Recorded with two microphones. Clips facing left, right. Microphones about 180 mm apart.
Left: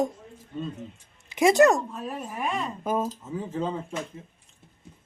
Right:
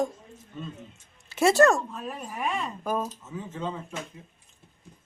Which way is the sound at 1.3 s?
15° left (ahead or behind).